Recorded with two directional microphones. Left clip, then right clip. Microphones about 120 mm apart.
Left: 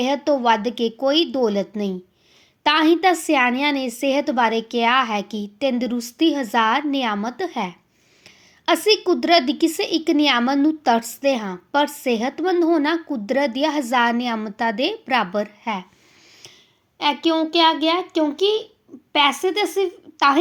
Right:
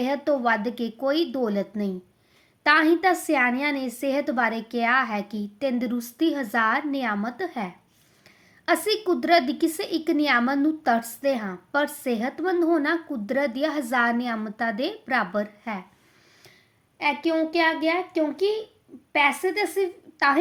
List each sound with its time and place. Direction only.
0.0 s a woman's voice: 25° left (ahead or behind)
17.0 s a woman's voice: 30° left (ahead or behind)